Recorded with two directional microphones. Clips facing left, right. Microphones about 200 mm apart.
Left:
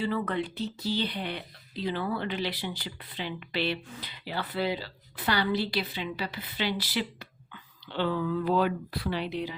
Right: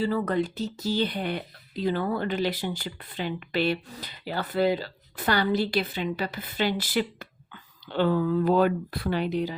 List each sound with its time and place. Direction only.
0.0 s speech: 40° right (ahead or behind)